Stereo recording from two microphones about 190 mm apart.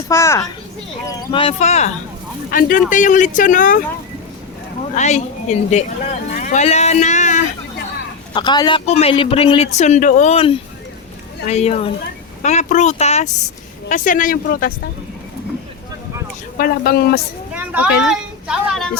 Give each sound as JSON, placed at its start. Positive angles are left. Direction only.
{"t": 0.1, "sound": "speech", "side_deg": 15}
{"t": 1.5, "sound": "speech", "side_deg": 35}
{"t": 2.5, "sound": "speech", "side_deg": 45}
{"t": 4.9, "sound": "speech", "side_deg": 35}
{"t": 8.3, "sound": "speech", "side_deg": 25}
{"t": 16.6, "sound": "speech", "side_deg": 50}
{"t": 17.5, "sound": "a sound", "side_deg": -10}
{"t": 18.1, "sound": "a woman's voice", "side_deg": 0}